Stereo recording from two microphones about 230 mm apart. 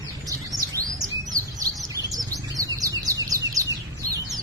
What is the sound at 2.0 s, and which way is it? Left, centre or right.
Bird, centre.